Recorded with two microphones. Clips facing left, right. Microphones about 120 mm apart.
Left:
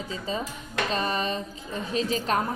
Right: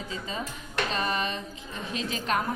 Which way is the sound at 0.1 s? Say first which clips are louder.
Left 4 dB; 35° left (ahead or behind).